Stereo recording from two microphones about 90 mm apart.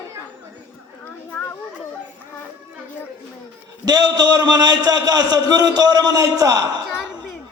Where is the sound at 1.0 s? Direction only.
15° left (ahead or behind).